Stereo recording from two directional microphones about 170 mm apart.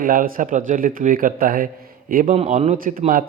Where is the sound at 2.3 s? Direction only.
40° right (ahead or behind); by 3.3 s 55° right (ahead or behind).